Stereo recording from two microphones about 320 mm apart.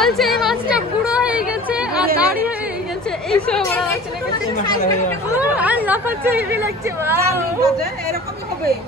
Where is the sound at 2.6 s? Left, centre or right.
Centre.